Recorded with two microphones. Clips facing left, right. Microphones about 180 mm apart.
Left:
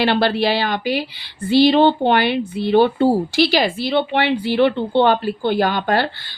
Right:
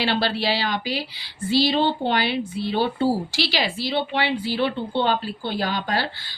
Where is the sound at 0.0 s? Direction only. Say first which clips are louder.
Left 6 dB; 55° left (ahead or behind).